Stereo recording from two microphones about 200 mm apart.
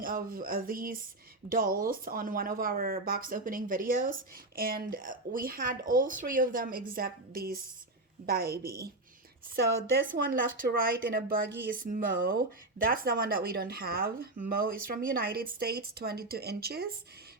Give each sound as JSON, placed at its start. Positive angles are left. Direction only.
{"t": 0.0, "sound": "speech", "side_deg": -45}
{"t": 9.9, "sound": "speech", "side_deg": -45}